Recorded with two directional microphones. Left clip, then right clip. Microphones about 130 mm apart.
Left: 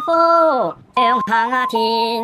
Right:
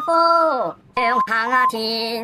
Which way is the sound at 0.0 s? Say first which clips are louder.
Left 2 dB; 10° left (ahead or behind).